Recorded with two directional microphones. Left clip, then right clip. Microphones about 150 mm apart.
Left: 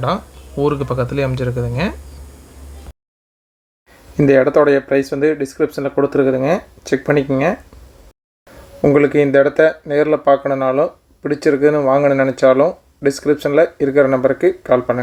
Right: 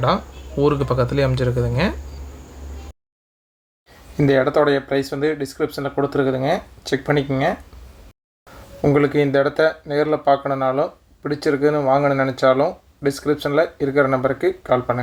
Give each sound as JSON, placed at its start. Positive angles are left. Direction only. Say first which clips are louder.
{"t": 0.0, "sound": "speech", "louder": "even", "side_deg": 15}
{"t": 4.2, "sound": "speech", "louder": "left 5 dB", "side_deg": 30}
{"t": 8.8, "sound": "speech", "louder": "left 5 dB", "side_deg": 25}